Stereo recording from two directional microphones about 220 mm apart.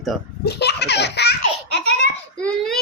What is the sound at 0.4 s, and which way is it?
Laughter, 50° left (ahead or behind).